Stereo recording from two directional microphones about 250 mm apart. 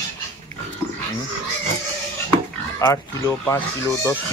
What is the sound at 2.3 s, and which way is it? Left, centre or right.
Speech, centre.